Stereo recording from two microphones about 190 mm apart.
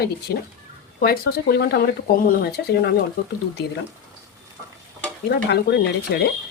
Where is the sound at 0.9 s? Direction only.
50° left (ahead or behind).